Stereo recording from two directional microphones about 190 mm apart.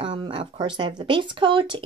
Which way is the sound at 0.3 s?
25° right (ahead or behind).